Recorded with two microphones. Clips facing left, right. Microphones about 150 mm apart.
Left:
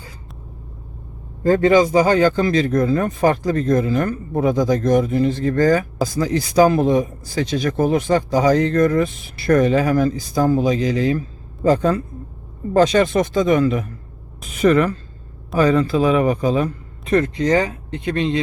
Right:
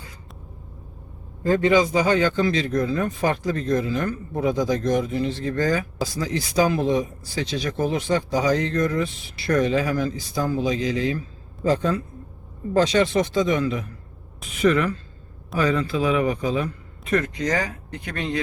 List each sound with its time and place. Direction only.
1.5 s a man's voice: 45° left (ahead or behind); by 18.3 s 25° left (ahead or behind)